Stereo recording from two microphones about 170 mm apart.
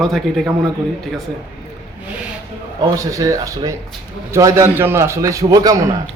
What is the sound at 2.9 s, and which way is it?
A man's voice, 20° right (ahead or behind).